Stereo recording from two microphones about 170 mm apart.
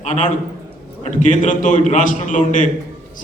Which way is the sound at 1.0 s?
50° left (ahead or behind).